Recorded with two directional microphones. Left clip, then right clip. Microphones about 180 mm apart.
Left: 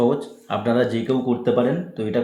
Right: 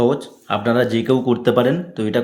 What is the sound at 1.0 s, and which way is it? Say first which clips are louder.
Speech: right 4 dB; 35° right (ahead or behind).